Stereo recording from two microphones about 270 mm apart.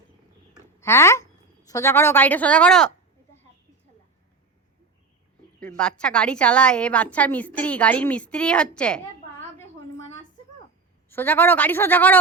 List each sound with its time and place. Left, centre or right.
0.8 s a woman's voice: centre
5.6 s a woman's voice: centre
11.1 s a woman's voice: centre